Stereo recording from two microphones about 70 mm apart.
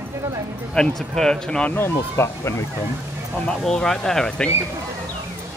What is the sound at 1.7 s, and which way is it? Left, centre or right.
Speech, left.